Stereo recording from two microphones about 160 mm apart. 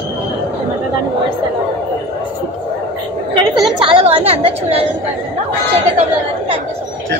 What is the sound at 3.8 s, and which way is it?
A woman's voice, 35° right (ahead or behind).